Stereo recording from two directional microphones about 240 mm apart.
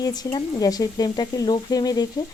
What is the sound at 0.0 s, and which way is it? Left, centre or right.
Speech, centre.